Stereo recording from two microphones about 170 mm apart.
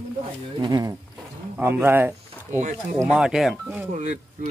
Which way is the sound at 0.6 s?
25° right (ahead or behind).